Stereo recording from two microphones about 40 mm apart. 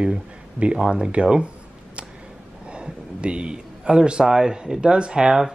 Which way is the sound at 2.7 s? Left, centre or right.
Right.